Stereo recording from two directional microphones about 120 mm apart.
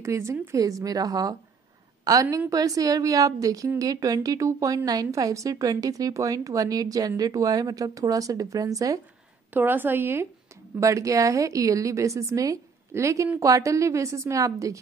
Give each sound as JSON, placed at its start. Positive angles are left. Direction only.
{"t": 0.0, "sound": "a woman's voice", "side_deg": -25}
{"t": 9.5, "sound": "a woman's voice", "side_deg": -15}